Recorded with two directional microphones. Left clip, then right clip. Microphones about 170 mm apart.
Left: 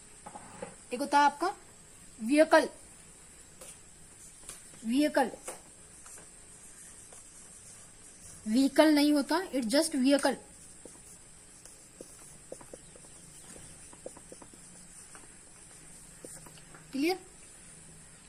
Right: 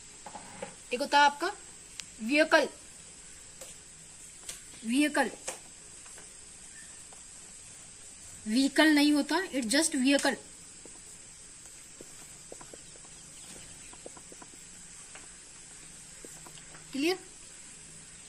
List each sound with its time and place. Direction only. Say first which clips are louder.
0.9 s speech: right 2 dB; 70° left (ahead or behind)
4.9 s speech: even; 60° left (ahead or behind)
8.4 s speech: even; 60° left (ahead or behind)
16.9 s a sound: right 1 dB; 65° left (ahead or behind)